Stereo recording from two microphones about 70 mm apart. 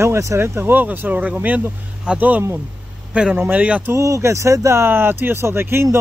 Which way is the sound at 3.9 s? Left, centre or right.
Right.